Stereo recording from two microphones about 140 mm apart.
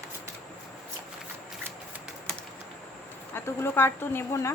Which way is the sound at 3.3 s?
15° left (ahead or behind).